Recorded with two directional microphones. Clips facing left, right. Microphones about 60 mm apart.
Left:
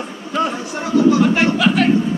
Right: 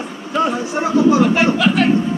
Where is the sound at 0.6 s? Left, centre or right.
Right.